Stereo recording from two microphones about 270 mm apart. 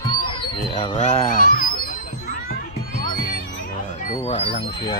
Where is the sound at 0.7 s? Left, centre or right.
Left.